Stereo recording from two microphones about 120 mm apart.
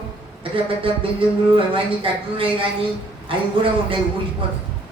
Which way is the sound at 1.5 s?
50° right (ahead or behind).